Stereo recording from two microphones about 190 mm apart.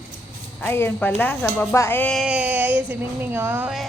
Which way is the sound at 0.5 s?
10° left (ahead or behind).